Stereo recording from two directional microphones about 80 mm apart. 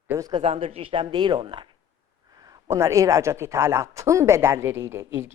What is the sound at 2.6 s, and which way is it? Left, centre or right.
A woman's voice, right.